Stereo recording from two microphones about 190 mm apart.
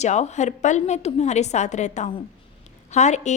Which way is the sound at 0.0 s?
35° left (ahead or behind).